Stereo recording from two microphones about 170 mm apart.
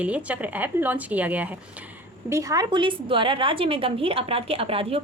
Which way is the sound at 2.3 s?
20° right (ahead or behind).